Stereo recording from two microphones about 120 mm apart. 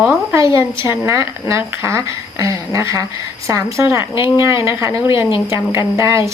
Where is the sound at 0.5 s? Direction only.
20° right (ahead or behind).